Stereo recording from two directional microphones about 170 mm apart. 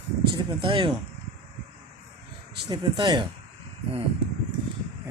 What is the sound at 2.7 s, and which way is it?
Speech, 25° right (ahead or behind).